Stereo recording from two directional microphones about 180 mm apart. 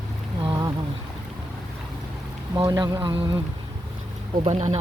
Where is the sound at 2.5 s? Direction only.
20° right (ahead or behind).